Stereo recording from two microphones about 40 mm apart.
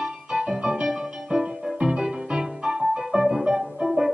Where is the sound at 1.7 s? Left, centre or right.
Centre.